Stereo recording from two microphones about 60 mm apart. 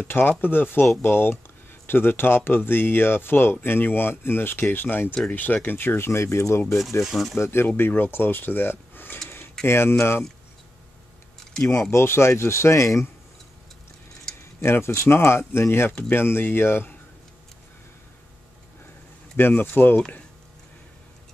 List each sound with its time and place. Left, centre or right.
0.1 s speech: left
7.0 s speech: centre
7.3 s speech: left
7.6 s speech: left
11.6 s speech: centre
11.9 s speech: left
14.3 s keys jangling: centre
14.6 s speech: left
19.3 s speech: left